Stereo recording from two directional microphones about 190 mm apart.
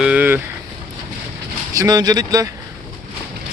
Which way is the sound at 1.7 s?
20° right (ahead or behind).